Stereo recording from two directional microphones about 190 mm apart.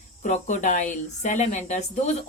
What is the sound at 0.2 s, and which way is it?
Speech, 40° left (ahead or behind).